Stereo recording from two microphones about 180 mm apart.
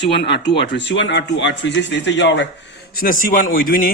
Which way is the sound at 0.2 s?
70° left (ahead or behind).